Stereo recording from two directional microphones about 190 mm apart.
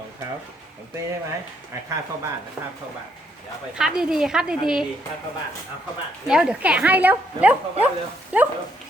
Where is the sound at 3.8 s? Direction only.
5° right (ahead or behind).